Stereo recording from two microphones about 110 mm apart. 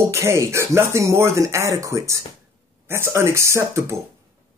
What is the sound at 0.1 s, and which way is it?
Speech, 25° right (ahead or behind).